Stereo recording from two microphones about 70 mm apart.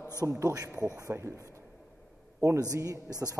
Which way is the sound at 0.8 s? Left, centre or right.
Left.